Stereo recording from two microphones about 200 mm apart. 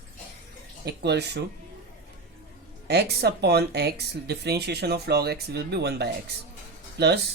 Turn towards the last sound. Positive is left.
turn(degrees=-55)  # may be behind; listen again after turning